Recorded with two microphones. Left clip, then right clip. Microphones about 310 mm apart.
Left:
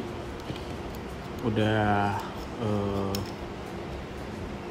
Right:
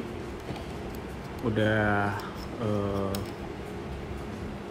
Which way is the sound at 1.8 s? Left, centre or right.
Left.